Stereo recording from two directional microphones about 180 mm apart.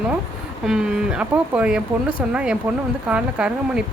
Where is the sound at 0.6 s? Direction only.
5° right (ahead or behind).